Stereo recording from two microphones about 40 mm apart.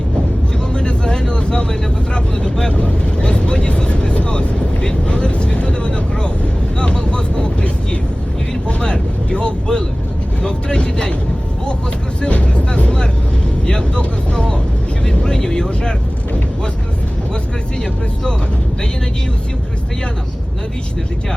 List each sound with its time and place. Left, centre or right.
0.7 s vehicle: left
10.4 s speech: left
12.3 s music: left
13.7 s speech: left